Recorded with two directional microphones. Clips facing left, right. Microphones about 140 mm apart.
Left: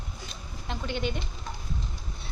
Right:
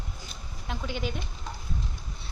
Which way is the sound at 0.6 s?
5° right (ahead or behind).